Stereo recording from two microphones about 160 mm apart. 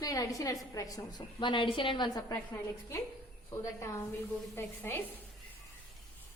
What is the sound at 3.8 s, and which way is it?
A woman's voice, 15° left (ahead or behind).